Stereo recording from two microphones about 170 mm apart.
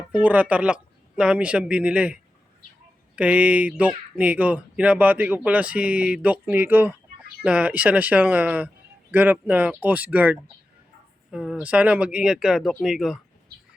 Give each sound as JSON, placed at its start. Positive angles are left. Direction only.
{"t": 0.2, "sound": "speech", "side_deg": -10}
{"t": 3.2, "sound": "speech", "side_deg": -10}